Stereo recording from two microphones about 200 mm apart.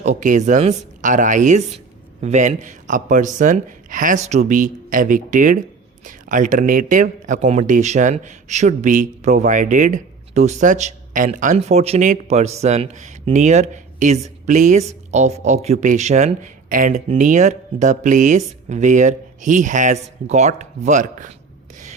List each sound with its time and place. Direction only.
0.0 s speech: 40° right (ahead or behind)